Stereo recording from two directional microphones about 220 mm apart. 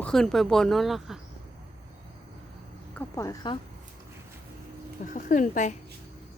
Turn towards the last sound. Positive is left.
turn(degrees=35)  # may be behind; listen again after turning